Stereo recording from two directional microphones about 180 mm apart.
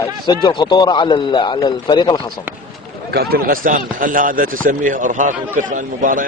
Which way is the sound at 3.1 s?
60° right (ahead or behind).